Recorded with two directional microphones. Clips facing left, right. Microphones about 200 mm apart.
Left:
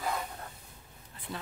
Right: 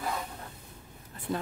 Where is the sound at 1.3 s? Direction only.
50° right (ahead or behind).